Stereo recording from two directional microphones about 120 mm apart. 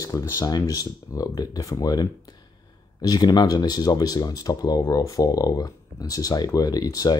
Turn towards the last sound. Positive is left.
turn(degrees=30)  # may be behind; listen again after turning